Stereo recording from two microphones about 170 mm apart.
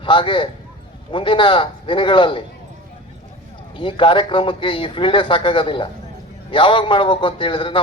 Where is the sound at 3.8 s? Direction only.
30° left (ahead or behind).